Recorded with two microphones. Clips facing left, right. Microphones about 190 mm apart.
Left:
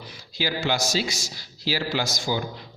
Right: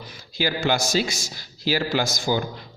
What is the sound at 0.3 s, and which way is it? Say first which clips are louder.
A man's voice: right 3 dB; 50° right (ahead or behind).